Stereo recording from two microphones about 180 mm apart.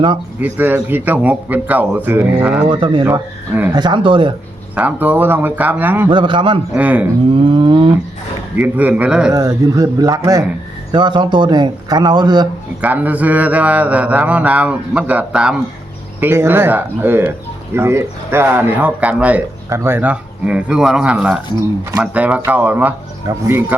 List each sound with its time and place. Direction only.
0.3 s speech: 10° right (ahead or behind)
2.6 s a man's voice: 25° right (ahead or behind)
3.0 s speech: 10° right (ahead or behind)
3.8 s a man's voice: 25° right (ahead or behind)
4.7 s speech: 10° right (ahead or behind)
6.1 s a man's voice: 25° right (ahead or behind)
6.7 s speech: 10° right (ahead or behind)
7.5 s a man's voice: 25° right (ahead or behind)
8.5 s speech: 10° right (ahead or behind)
9.3 s a man's voice: 20° right (ahead or behind)
12.8 s speech: 10° right (ahead or behind)